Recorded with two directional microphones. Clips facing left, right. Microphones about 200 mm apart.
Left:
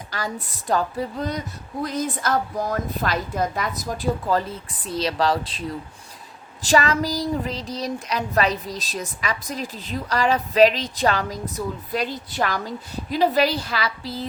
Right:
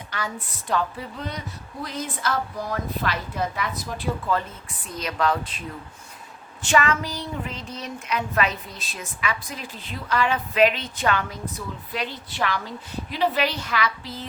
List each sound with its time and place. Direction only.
0.1 s speech: 40° left (ahead or behind)